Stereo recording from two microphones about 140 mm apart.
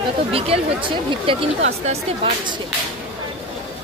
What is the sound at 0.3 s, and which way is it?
Speech, 40° right (ahead or behind).